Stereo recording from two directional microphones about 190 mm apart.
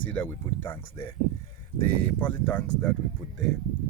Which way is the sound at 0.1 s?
10° left (ahead or behind).